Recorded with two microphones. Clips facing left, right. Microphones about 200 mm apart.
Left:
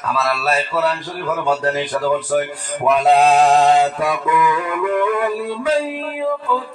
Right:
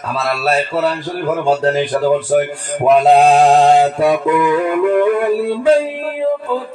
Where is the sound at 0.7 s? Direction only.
30° right (ahead or behind).